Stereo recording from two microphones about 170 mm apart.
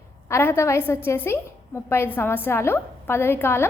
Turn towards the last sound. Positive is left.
turn(degrees=15)  # may be behind; listen again after turning